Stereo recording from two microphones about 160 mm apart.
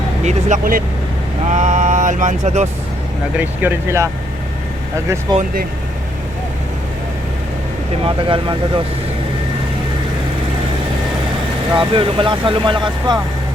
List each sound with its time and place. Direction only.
0.3 s speech: 45° right (ahead or behind)
3.3 s speech: 10° right (ahead or behind)
5.3 s speech: 25° right (ahead or behind)
8.0 s speech: 30° right (ahead or behind)
11.7 s speech: 30° right (ahead or behind)